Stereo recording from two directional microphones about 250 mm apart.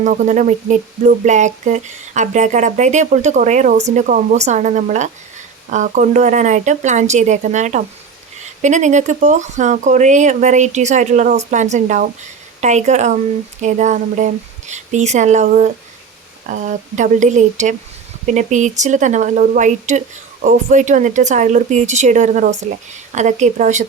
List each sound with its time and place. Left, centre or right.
0.0 s a woman's voice: right